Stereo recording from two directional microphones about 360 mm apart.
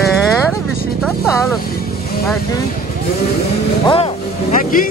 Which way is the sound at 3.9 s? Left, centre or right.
Centre.